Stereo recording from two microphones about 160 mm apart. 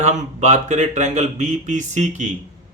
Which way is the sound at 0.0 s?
45° right (ahead or behind).